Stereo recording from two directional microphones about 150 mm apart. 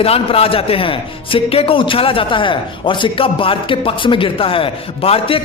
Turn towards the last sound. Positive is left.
turn(degrees=40)  # may be behind; listen again after turning